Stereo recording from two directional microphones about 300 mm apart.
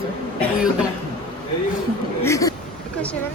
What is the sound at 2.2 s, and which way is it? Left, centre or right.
Speech, centre.